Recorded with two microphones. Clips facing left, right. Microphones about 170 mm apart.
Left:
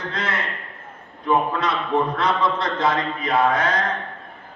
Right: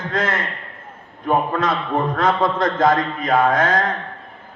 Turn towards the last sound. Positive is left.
turn(degrees=-45)  # may be behind; listen again after turning